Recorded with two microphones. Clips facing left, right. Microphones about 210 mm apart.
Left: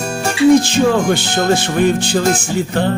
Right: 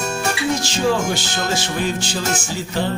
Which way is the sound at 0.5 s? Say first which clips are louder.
Left 8 dB; 55° left (ahead or behind).